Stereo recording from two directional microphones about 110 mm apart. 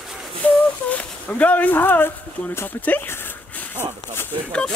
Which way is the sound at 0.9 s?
15° left (ahead or behind).